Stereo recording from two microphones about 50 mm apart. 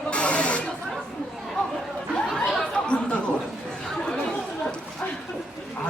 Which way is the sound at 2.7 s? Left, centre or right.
Left.